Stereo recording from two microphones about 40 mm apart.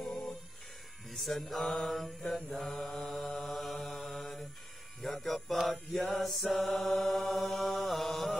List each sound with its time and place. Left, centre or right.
0.0 s music: centre
1.1 s mantra: centre
5.0 s music: centre
5.9 s mantra: centre